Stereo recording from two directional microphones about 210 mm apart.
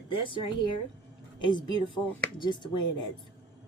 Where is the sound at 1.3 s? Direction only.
20° left (ahead or behind).